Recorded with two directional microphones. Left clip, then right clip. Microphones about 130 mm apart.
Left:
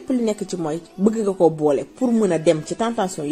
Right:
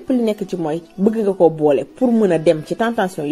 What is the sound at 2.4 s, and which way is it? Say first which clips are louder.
Speech: right 3 dB; 15° right (ahead or behind).